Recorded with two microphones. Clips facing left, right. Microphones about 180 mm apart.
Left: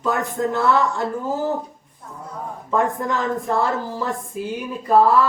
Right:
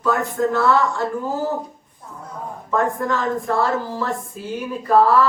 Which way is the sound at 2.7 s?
20° left (ahead or behind).